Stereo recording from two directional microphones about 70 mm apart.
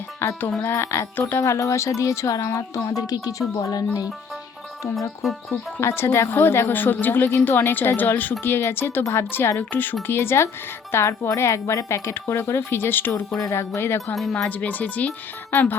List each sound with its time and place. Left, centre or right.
0.6 s a woman's voice: left
1.4 s speech: left
5.2 s speech: centre
5.8 s a woman's voice: left
10.9 s a woman's voice: left
14.2 s speech: centre
14.4 s speech: left